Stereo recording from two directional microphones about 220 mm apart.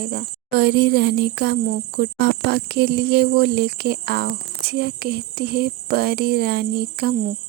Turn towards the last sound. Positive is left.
turn(degrees=-45)  # may be behind; listen again after turning